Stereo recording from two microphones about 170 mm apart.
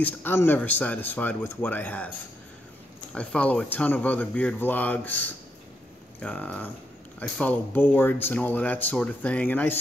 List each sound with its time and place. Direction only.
0.0 s speech: 10° left (ahead or behind)
3.2 s speech: 5° left (ahead or behind)